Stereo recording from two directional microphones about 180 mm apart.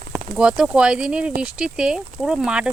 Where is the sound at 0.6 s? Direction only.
5° right (ahead or behind).